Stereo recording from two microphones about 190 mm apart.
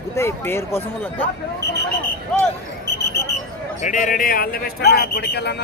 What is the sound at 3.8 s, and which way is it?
A man's voice, 40° left (ahead or behind).